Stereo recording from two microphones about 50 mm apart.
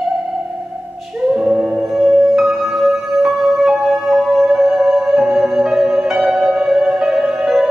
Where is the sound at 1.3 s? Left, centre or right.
Centre.